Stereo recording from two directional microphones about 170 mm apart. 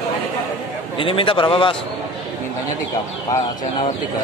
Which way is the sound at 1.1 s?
30° left (ahead or behind).